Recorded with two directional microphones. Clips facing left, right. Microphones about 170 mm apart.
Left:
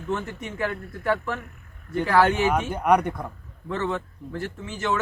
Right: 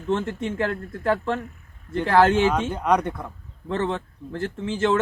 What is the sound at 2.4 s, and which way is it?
Speech, 10° left (ahead or behind).